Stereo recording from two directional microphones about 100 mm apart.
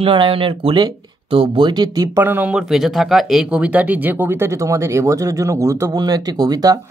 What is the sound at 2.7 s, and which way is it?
Speech, centre (ahead or behind).